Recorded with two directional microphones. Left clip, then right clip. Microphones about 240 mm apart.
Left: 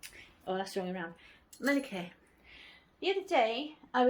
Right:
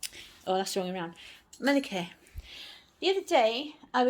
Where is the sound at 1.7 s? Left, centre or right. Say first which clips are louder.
Right 5 dB; right.